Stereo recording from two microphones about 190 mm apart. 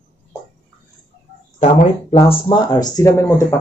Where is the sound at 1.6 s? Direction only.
35° left (ahead or behind); by 3.6 s 15° left (ahead or behind).